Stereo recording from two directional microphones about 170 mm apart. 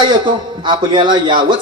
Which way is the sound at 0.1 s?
25° right (ahead or behind).